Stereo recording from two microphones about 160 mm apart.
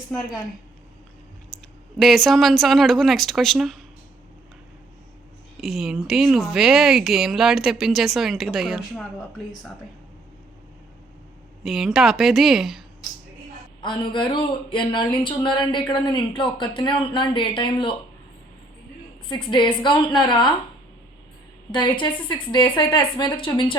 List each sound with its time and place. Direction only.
2.0 s speech: centre (ahead or behind)
5.5 s speech: centre (ahead or behind)
11.6 s speech: centre (ahead or behind)
13.8 s speech: 30° left (ahead or behind)
19.3 s speech: 30° left (ahead or behind)
21.7 s a woman's voice: 30° left (ahead or behind)